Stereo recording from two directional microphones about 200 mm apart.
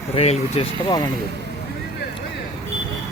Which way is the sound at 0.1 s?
30° left (ahead or behind).